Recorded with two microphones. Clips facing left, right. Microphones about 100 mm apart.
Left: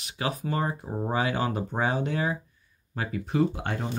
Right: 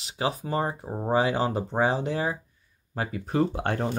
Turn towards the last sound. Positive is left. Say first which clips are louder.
# right 1 dB
turn(degrees=-40)  # may be behind; listen again after turning